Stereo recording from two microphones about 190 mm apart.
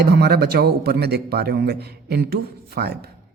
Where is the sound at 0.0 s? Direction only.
60° right (ahead or behind).